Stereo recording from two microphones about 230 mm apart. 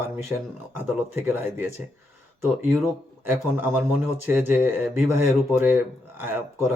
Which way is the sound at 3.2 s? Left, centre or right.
Centre.